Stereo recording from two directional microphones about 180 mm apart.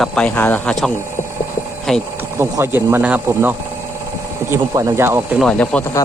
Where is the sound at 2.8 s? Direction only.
10° right (ahead or behind).